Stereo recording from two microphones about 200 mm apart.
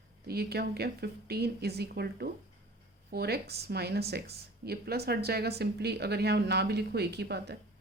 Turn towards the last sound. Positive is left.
turn(degrees=-55)  # may be behind; listen again after turning